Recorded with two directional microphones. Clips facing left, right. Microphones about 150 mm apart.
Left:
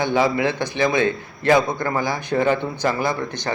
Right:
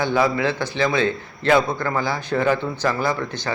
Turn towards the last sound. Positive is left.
turn(degrees=15)  # may be behind; listen again after turning